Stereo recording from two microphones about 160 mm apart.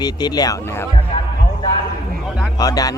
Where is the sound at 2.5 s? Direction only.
25° left (ahead or behind).